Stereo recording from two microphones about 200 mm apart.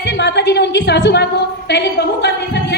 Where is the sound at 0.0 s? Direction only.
60° left (ahead or behind).